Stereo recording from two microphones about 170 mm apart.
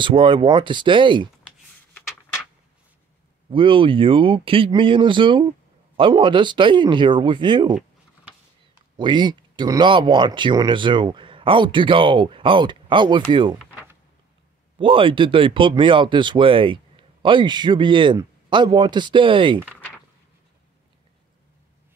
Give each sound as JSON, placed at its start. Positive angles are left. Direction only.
{"t": 0.0, "sound": "speech", "side_deg": -30}
{"t": 3.4, "sound": "speech", "side_deg": -30}
{"t": 8.9, "sound": "speech", "side_deg": -25}
{"t": 14.8, "sound": "speech", "side_deg": -30}